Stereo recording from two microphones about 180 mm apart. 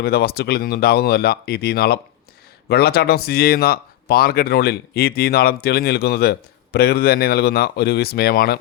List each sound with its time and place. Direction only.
0.0 s speech: 60° left (ahead or behind)